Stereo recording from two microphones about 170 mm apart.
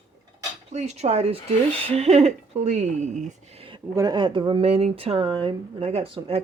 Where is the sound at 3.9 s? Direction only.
25° right (ahead or behind).